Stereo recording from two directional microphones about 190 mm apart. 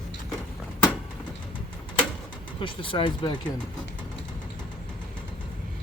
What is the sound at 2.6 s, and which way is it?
Speech, 25° left (ahead or behind).